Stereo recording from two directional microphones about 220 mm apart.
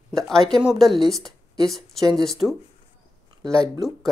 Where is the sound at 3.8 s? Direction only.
Centre (ahead or behind).